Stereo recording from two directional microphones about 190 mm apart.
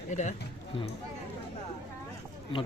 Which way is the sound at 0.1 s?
40° left (ahead or behind).